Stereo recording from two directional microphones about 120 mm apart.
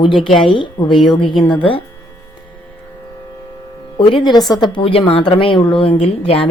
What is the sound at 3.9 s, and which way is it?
A woman's voice, 45° left (ahead or behind).